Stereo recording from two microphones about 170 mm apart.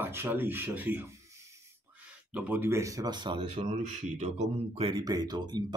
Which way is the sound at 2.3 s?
10° right (ahead or behind).